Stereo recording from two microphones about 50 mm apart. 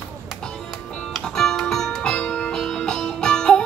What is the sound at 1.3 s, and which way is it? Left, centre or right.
Music, centre.